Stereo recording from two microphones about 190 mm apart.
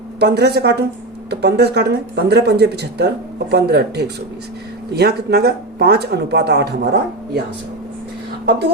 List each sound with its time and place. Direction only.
0.2 s speech: 60° right (ahead or behind)